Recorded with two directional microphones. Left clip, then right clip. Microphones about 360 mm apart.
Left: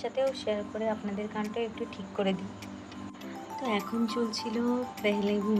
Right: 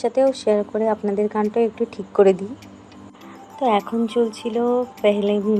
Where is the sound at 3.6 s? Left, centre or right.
Centre.